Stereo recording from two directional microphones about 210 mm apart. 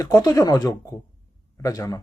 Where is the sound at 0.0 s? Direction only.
15° left (ahead or behind).